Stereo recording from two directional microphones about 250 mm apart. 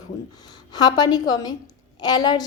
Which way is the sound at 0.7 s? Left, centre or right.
Centre.